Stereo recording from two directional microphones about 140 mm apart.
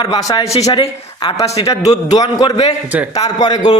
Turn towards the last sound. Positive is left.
turn(degrees=30)  # may be behind; listen again after turning